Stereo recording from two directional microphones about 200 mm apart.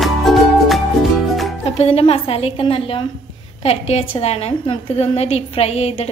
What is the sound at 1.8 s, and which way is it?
A woman's voice, 30° left (ahead or behind).